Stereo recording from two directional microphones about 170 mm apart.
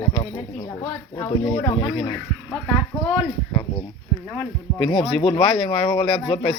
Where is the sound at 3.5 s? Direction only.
20° left (ahead or behind).